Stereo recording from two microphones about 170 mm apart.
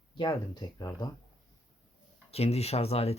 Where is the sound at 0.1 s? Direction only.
25° left (ahead or behind).